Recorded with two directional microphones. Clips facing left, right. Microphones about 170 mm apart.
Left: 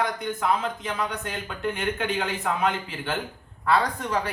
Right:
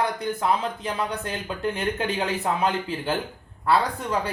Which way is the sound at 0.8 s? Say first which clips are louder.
Right 2 dB; 35° right (ahead or behind).